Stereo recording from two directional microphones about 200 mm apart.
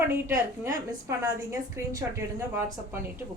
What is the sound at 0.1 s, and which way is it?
A woman's voice, 10° right (ahead or behind).